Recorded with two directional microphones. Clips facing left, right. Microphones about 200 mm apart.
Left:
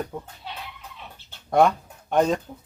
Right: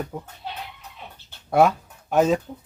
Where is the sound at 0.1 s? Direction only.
5° right (ahead or behind).